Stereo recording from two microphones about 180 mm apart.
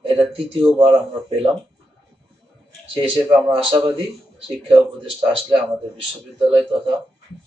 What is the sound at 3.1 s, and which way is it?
A man's voice, 30° right (ahead or behind).